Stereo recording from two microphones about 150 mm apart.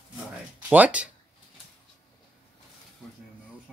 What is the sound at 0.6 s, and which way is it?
Speech, 10° right (ahead or behind).